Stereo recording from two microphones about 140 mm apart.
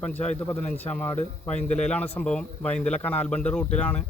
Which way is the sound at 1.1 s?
55° left (ahead or behind).